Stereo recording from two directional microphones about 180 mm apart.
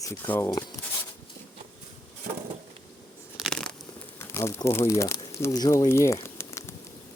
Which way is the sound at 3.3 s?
Centre (ahead or behind).